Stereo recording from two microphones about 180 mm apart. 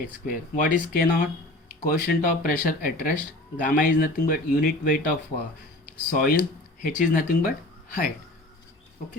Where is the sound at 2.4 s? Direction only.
50° left (ahead or behind).